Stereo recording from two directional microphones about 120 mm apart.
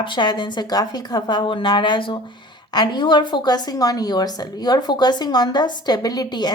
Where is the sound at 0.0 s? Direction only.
40° left (ahead or behind).